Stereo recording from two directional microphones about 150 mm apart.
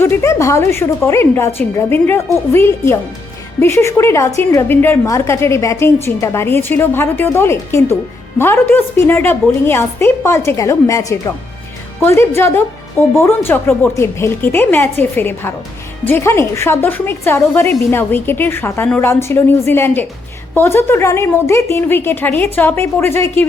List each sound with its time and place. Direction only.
0.0 s a woman's voice: 15° left (ahead or behind)